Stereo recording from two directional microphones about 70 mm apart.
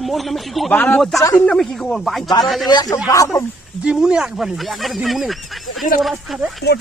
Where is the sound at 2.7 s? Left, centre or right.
Left.